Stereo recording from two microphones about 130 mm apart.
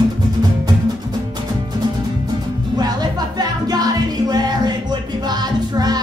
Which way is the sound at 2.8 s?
30° right (ahead or behind).